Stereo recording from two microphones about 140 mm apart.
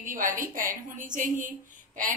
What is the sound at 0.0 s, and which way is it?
A woman's voice, 70° right (ahead or behind).